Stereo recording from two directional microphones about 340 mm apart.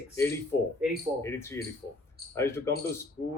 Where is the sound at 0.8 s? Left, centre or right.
Centre.